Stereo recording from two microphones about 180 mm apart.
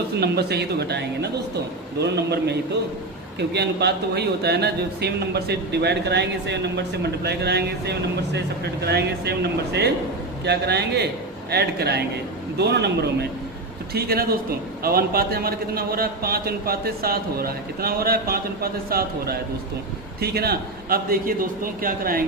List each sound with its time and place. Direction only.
0.2 s a man's voice: 65° right (ahead or behind)
13.9 s a man's voice: 55° right (ahead or behind)